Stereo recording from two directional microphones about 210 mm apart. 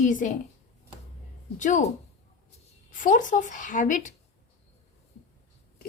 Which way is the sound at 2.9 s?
40° left (ahead or behind).